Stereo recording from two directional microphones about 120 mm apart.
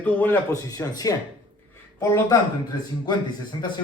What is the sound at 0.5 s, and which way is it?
Speech, 30° left (ahead or behind).